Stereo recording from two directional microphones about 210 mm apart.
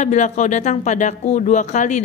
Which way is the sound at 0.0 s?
35° left (ahead or behind).